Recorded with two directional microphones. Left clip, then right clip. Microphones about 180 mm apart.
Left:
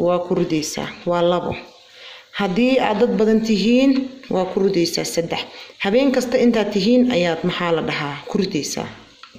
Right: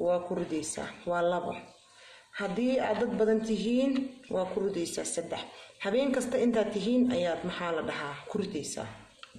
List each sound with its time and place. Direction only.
0.1 s speech: 40° left (ahead or behind)